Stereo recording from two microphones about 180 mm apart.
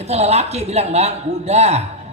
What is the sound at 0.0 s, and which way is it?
A man's voice, 35° right (ahead or behind).